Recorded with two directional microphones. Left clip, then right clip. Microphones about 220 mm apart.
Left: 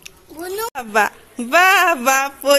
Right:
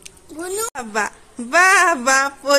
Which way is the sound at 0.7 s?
5° left (ahead or behind).